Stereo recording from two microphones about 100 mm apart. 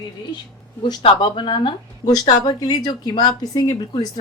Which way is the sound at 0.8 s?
50° left (ahead or behind).